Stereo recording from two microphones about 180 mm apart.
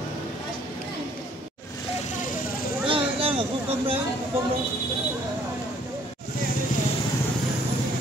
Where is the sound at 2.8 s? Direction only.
30° right (ahead or behind).